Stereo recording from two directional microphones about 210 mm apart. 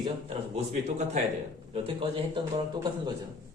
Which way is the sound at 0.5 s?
30° right (ahead or behind).